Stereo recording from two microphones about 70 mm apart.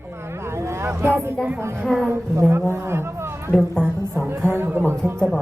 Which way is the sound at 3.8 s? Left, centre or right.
Centre.